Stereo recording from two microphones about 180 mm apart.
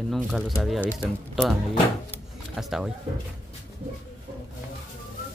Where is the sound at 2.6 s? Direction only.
5° right (ahead or behind).